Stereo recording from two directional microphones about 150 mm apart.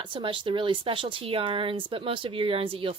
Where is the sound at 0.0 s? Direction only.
35° right (ahead or behind).